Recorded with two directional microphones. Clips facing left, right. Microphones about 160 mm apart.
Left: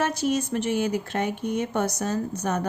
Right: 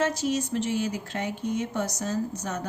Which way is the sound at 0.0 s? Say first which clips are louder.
Left 2 dB; 65° left (ahead or behind).